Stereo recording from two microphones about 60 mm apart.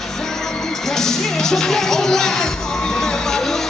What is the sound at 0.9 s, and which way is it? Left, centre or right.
Music, centre.